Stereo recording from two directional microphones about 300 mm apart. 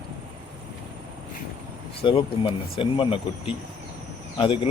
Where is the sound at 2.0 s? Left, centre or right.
Centre.